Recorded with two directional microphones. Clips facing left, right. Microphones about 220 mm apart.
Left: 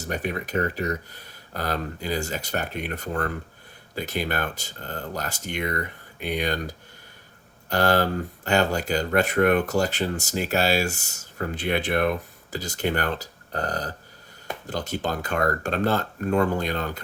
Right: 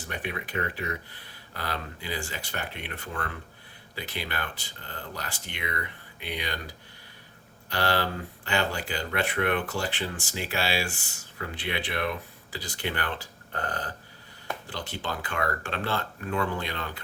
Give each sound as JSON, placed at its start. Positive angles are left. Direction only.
{"t": 0.0, "sound": "speech", "side_deg": 40}